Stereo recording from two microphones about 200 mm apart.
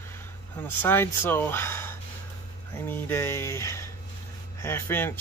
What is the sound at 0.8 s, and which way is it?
A man's voice, 10° left (ahead or behind).